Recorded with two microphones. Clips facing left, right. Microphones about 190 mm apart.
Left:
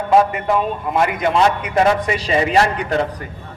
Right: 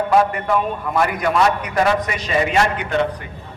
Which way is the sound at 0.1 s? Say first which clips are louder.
Left 4 dB; 20° left (ahead or behind).